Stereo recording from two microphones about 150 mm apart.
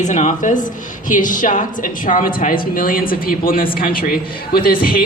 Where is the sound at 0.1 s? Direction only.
55° left (ahead or behind).